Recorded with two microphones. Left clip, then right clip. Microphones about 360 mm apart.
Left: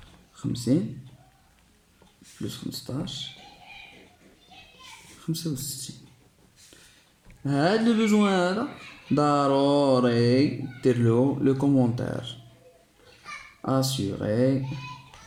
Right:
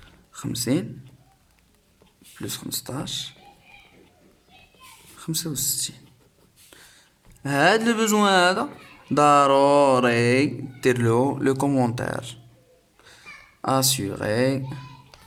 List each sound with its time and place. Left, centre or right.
0.3 s speech: right
2.4 s speech: right
5.2 s speech: right
7.4 s speech: right
13.6 s speech: right